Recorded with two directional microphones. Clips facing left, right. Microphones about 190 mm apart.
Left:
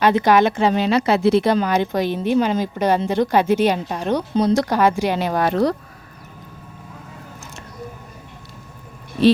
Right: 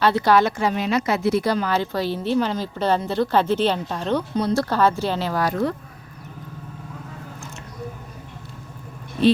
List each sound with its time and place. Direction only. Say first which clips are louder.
0.0 s a woman's voice: left 3 dB; 15° left (ahead or behind)